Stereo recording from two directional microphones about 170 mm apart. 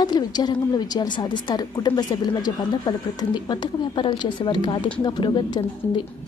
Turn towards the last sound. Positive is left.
turn(degrees=25)  # may be behind; listen again after turning